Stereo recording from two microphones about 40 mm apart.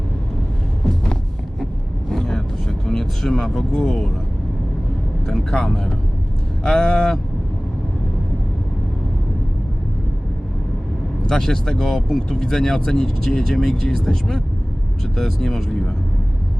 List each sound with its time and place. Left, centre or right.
2.0 s vehicle: centre
3.7 s speech: centre
5.2 s speech: centre
11.3 s speech: centre